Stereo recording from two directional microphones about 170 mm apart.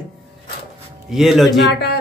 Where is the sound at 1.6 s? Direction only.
75° left (ahead or behind).